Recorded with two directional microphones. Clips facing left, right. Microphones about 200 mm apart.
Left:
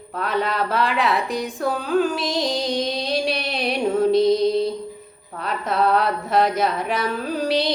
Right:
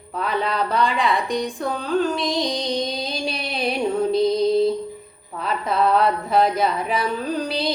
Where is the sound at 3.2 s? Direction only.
Centre (ahead or behind).